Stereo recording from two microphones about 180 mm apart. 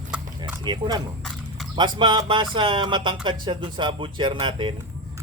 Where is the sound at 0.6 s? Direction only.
25° right (ahead or behind).